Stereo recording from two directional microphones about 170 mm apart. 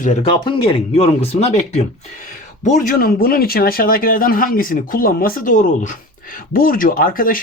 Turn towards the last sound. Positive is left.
turn(degrees=55)  # may be behind; listen again after turning